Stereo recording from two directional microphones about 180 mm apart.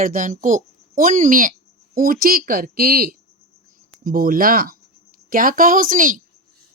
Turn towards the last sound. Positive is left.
turn(degrees=-50)  # may be behind; listen again after turning